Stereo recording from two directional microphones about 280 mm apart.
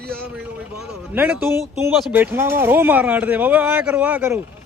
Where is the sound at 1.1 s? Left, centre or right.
Centre.